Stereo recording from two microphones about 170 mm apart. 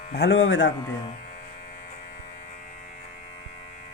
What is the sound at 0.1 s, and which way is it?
Speech, 80° left.